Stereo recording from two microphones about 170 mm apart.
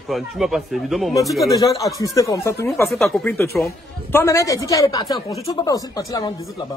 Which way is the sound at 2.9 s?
Centre (ahead or behind).